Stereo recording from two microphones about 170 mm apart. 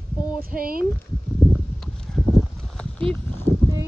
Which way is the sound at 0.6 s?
55° right (ahead or behind).